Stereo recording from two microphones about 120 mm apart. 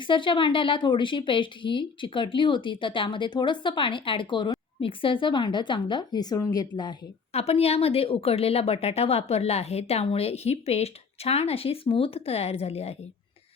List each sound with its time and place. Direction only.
0.0 s speech: 45° left (ahead or behind)
7.3 s speech: 60° left (ahead or behind)